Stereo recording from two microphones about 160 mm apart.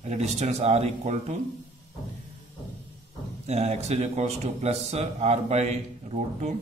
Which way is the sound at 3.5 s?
40° right (ahead or behind).